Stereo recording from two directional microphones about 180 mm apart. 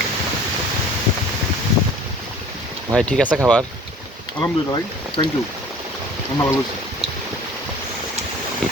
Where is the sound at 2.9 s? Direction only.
5° left (ahead or behind).